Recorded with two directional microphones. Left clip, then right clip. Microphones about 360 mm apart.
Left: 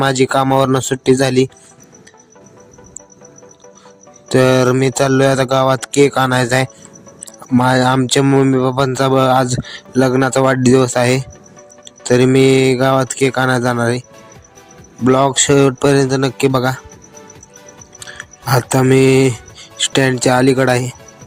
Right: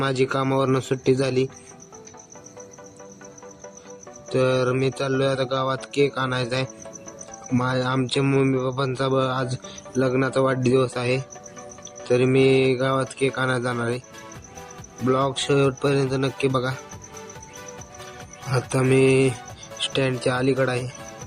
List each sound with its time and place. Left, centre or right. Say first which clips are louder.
0.0 s speech: left 9 dB; left
4.3 s speech: left 9 dB; left
15.0 s speech: left 10 dB; centre
18.5 s speech: left 8 dB; centre